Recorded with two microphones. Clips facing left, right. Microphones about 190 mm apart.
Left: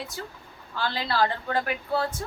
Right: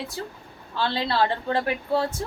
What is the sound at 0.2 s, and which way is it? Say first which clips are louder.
A woman's voice: right 3 dB; 30° right (ahead or behind).